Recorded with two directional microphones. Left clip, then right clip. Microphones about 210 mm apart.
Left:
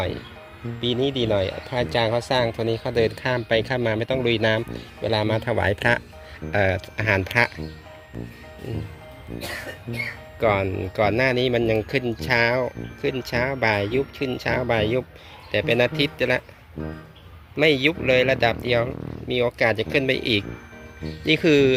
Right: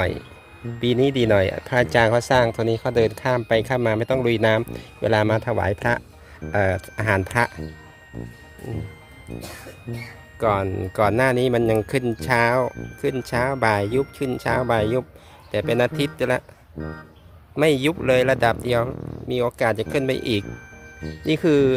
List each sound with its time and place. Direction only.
0.8 s speech: 35° right (ahead or behind); by 7.5 s 15° right (ahead or behind)
10.4 s speech: 15° right (ahead or behind)
17.6 s speech: 20° right (ahead or behind)